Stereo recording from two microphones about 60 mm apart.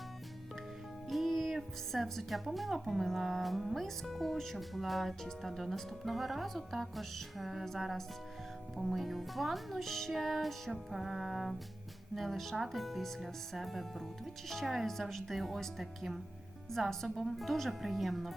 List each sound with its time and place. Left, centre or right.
1.1 s speech: centre